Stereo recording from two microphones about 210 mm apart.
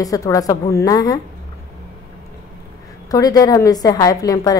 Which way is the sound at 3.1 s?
15° left (ahead or behind).